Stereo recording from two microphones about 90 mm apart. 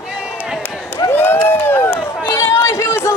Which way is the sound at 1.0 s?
25° left (ahead or behind).